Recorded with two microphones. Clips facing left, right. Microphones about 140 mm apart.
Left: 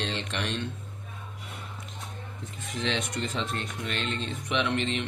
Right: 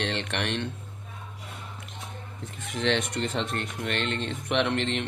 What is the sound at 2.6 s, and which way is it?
Speech, 55° right (ahead or behind).